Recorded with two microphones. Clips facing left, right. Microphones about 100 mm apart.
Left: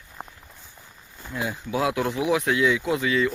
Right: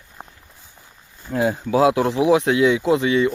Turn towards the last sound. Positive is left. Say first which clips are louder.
# right 6 dB
turn(degrees=-25)  # may be behind; listen again after turning